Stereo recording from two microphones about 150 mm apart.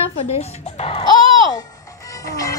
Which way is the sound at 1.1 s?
25° left (ahead or behind).